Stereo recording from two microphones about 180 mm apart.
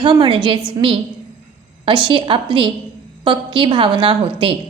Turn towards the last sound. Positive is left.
turn(degrees=-30)  # may be behind; listen again after turning